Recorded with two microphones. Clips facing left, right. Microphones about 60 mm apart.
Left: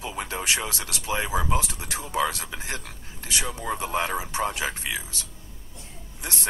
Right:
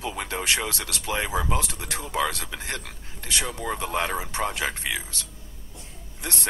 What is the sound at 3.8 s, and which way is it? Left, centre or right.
Speech, left.